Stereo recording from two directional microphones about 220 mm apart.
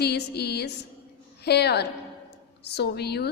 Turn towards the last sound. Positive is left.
turn(degrees=50)  # may be behind; listen again after turning